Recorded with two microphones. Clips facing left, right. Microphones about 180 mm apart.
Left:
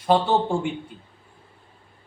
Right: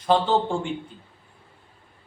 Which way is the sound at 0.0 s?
10° left (ahead or behind).